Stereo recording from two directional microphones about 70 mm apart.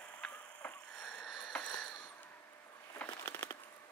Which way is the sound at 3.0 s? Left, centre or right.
Left.